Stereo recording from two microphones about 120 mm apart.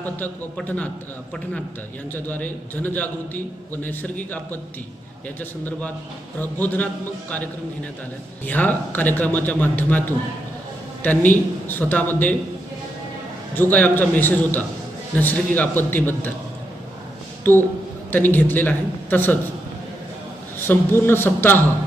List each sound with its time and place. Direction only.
0.0 s a man's voice: 15° left (ahead or behind)
2.2 s a man's voice: 15° left (ahead or behind)
8.5 s a man's voice: 15° left (ahead or behind)
13.6 s a man's voice: 15° left (ahead or behind)
17.4 s a man's voice: 15° left (ahead or behind)
20.6 s a man's voice: 20° left (ahead or behind)